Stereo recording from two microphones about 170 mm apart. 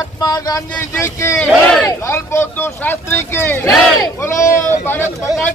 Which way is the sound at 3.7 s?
Centre (ahead or behind).